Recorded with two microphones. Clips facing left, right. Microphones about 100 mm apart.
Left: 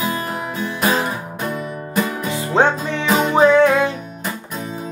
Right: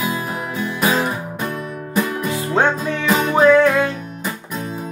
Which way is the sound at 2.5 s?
25° left (ahead or behind).